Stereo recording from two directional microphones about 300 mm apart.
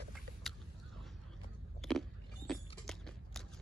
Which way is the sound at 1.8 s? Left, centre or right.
Centre.